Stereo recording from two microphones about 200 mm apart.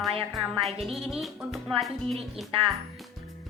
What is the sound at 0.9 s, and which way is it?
Speech, centre (ahead or behind).